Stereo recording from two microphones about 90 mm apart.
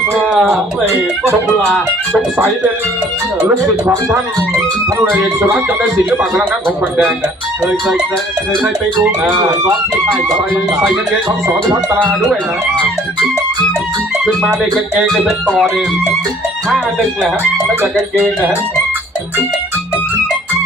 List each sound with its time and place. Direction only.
0.3 s speech: centre (ahead or behind)
7.6 s speech: 10° right (ahead or behind)
8.6 s speech: 20° right (ahead or behind)
11.4 s speech: 25° right (ahead or behind)
14.3 s speech: 5° right (ahead or behind)